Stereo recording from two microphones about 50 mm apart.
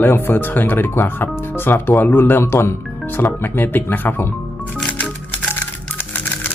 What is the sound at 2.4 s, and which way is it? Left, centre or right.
Speech, left.